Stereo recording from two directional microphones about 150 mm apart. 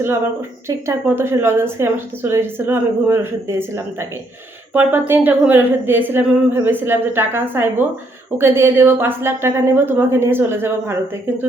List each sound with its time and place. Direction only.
0.9 s a woman's voice: 15° right (ahead or behind)